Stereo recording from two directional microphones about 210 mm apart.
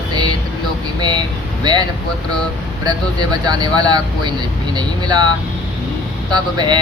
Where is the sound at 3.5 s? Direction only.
20° right (ahead or behind).